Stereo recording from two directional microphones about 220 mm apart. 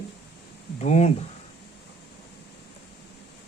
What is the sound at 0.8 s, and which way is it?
Speech, 30° left (ahead or behind).